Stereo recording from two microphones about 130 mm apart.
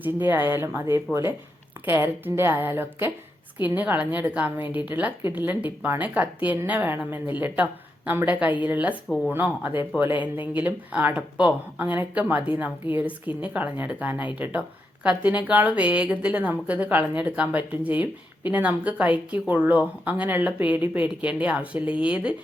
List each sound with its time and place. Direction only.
0.0 s a woman's voice: 15° right (ahead or behind)